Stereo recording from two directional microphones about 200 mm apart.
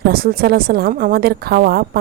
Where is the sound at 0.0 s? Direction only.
50° right (ahead or behind).